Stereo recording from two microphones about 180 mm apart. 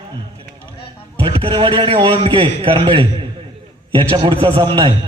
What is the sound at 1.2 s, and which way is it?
A man's voice, 30° right (ahead or behind).